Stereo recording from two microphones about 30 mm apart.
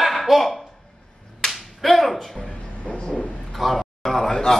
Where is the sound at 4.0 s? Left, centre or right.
Centre.